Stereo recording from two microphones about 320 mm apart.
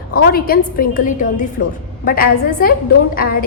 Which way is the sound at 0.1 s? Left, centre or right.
Left.